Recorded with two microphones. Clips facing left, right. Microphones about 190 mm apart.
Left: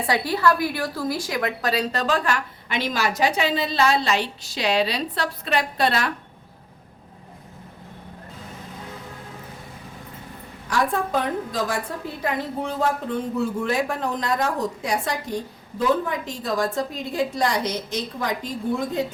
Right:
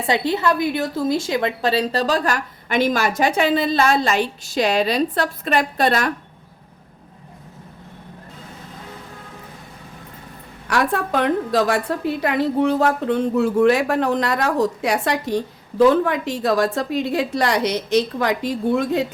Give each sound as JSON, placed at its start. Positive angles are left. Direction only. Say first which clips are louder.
{"t": 0.0, "sound": "a woman's voice", "louder": "right 2 dB", "side_deg": -25}
{"t": 10.7, "sound": "a woman's voice", "louder": "right 3 dB", "side_deg": -75}